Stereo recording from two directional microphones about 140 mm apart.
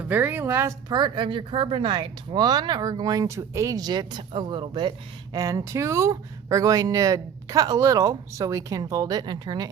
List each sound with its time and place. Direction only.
0.0 s speech: 15° right (ahead or behind)
0.9 s speech: 30° right (ahead or behind)